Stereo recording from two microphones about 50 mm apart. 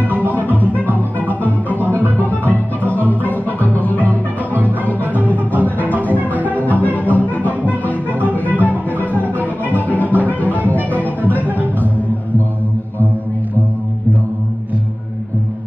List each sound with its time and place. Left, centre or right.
0.3 s music: left